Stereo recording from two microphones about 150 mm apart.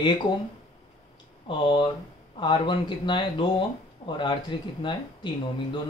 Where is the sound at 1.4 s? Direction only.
35° left (ahead or behind).